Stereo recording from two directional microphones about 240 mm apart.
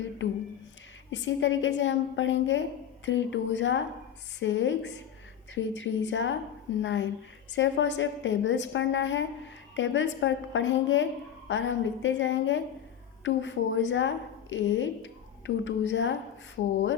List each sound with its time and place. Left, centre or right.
1.1 s a woman's voice: left